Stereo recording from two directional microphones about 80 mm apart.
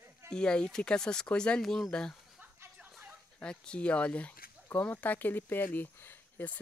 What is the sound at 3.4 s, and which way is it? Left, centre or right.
Speech, centre.